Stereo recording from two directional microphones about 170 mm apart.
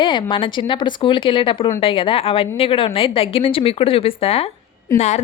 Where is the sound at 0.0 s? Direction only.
25° left (ahead or behind).